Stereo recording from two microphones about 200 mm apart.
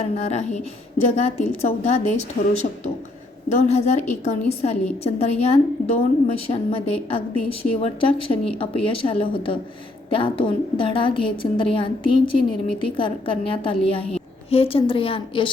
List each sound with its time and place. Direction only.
0.0 s a woman's voice: 35° left (ahead or behind)